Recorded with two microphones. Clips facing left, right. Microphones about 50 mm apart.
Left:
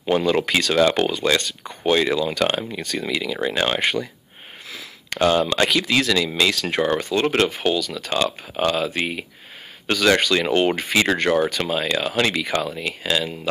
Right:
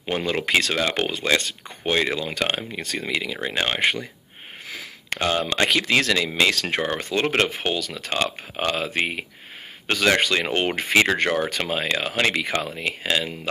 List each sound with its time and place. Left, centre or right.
0.0 s speech: right
5.2 s speech: right
5.7 s speech: right
6.8 s speech: right
9.8 s speech: right